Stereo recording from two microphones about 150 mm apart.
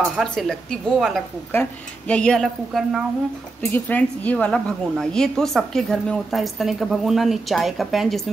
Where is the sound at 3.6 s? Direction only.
10° left (ahead or behind).